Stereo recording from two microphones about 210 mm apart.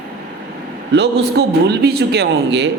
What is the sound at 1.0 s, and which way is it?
Speech, 50° right (ahead or behind).